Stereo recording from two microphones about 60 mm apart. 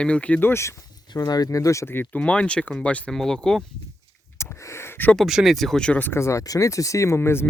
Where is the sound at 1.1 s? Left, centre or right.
Left.